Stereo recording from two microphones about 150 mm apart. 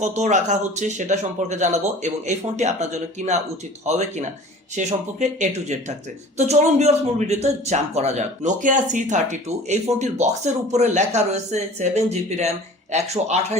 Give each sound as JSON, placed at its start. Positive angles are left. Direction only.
{"t": 0.0, "sound": "speech", "side_deg": -55}